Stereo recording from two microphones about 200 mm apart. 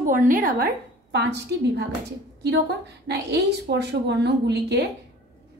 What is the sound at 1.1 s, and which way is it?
Speech, 55° right (ahead or behind).